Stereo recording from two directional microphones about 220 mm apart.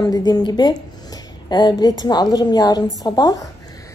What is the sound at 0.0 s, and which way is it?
A woman's voice, 15° left (ahead or behind).